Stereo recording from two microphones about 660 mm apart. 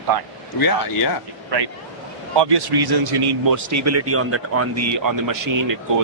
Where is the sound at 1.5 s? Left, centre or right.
Right.